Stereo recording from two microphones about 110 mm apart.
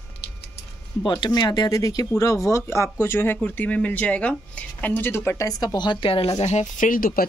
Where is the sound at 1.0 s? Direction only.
40° left (ahead or behind); by 5.5 s 20° left (ahead or behind).